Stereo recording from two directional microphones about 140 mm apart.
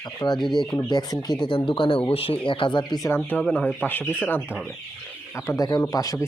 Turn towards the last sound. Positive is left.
turn(degrees=25)  # may be behind; listen again after turning